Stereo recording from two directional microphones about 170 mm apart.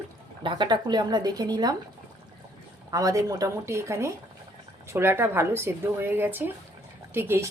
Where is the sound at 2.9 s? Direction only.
20° right (ahead or behind).